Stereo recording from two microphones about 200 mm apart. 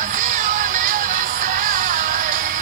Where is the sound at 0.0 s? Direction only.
40° right (ahead or behind).